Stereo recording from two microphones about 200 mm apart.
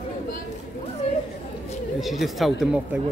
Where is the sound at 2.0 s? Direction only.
Centre (ahead or behind).